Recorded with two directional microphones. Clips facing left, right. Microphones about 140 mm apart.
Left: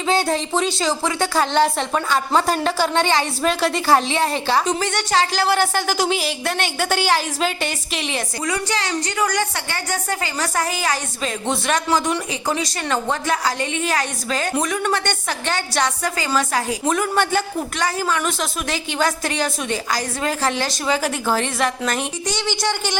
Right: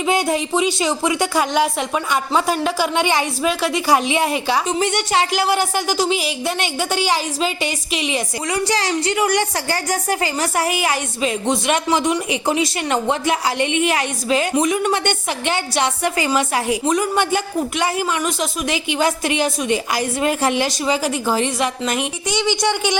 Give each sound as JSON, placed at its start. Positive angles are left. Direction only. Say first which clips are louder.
{"t": 0.0, "sound": "a woman's voice", "louder": "right 1 dB", "side_deg": -15}
{"t": 5.5, "sound": "speech", "louder": "even", "side_deg": -5}
{"t": 8.4, "sound": "a woman's voice", "louder": "right 3 dB", "side_deg": -30}
{"t": 11.2, "sound": "a woman's voice", "louder": "right 4 dB", "side_deg": -15}
{"t": 16.8, "sound": "speech", "louder": "right 1 dB", "side_deg": 0}
{"t": 17.2, "sound": "a woman's voice", "louder": "right 1 dB", "side_deg": -20}